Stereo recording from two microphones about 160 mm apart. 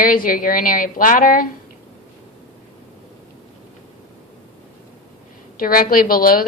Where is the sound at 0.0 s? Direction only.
60° left (ahead or behind).